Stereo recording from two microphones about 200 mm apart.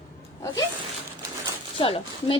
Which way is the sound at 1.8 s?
25° left (ahead or behind).